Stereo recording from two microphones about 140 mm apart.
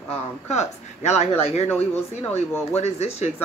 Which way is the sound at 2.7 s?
50° left (ahead or behind).